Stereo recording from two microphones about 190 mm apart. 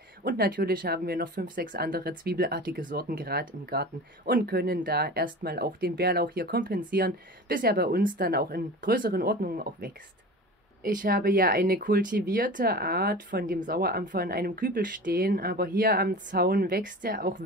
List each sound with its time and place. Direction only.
0.2 s speech: 55° right (ahead or behind)